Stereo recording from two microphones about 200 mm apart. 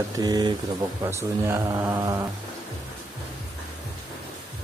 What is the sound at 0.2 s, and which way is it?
Speech, 20° right (ahead or behind).